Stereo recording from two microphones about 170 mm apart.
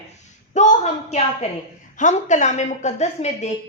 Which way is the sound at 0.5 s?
40° left (ahead or behind).